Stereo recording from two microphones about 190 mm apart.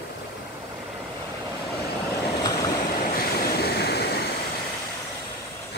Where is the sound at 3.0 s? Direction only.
50° left (ahead or behind).